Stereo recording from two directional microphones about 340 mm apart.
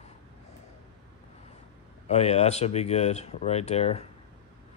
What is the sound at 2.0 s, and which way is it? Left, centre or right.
Speech, centre.